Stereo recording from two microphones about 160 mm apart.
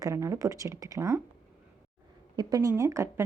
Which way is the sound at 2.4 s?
25° right (ahead or behind).